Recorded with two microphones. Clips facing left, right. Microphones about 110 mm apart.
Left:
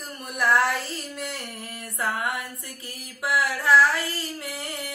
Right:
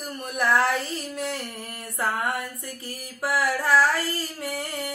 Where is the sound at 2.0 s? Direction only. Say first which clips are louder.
Right 1 dB; 50° right (ahead or behind).